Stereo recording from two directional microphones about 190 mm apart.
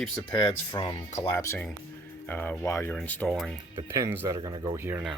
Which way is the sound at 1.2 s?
10° left (ahead or behind).